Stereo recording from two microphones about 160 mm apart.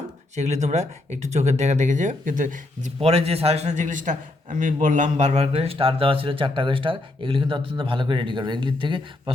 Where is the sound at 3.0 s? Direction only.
40° right (ahead or behind).